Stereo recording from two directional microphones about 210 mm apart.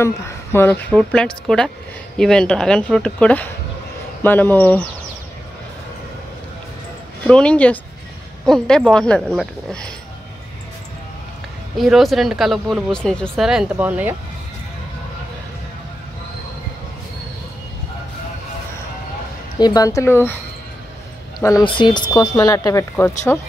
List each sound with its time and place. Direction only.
0.0 s a woman's voice: 10° left (ahead or behind)
7.2 s speech: 5° left (ahead or behind)
11.7 s speech: centre (ahead or behind)
19.6 s a woman's voice: 15° left (ahead or behind)
21.4 s a woman's voice: 15° left (ahead or behind)